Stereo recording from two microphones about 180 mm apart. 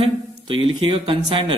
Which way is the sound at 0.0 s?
30° right (ahead or behind).